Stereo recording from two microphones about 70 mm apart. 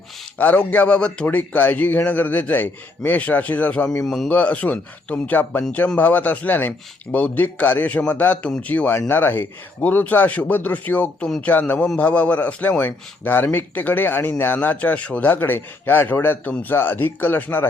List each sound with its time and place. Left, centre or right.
0.3 s a man's voice: left
1.4 s a man's voice: left
4.0 s a man's voice: centre
4.3 s a man's voice: left